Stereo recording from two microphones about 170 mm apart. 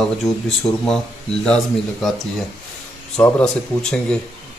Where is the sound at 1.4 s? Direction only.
5° left (ahead or behind).